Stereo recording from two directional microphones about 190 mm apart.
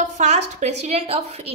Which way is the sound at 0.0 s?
40° right (ahead or behind).